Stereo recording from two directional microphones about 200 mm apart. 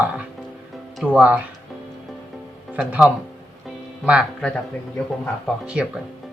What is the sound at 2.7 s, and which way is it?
Speech, 5° right (ahead or behind).